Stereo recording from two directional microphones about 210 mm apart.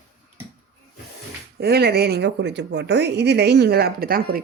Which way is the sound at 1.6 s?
50° right (ahead or behind).